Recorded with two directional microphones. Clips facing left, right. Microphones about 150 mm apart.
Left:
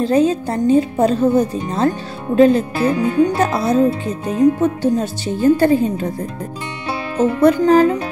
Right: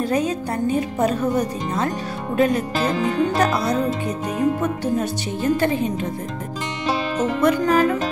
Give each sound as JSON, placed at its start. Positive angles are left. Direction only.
{"t": 0.0, "sound": "a woman's voice", "side_deg": 25}
{"t": 7.2, "sound": "speech", "side_deg": 30}